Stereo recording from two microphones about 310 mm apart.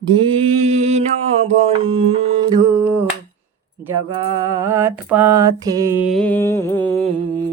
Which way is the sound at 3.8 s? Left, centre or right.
Centre.